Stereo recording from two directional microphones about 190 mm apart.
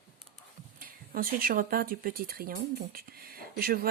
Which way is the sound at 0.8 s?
50° right (ahead or behind).